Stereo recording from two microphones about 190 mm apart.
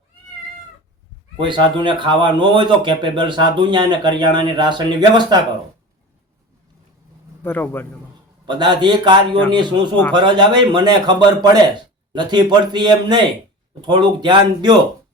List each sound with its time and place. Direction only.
1.4 s speech: 25° right (ahead or behind)
7.4 s a man's voice: 10° left (ahead or behind)
8.4 s speech: 25° right (ahead or behind)